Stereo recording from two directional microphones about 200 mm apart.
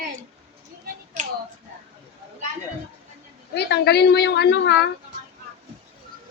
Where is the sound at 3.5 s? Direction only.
55° left (ahead or behind).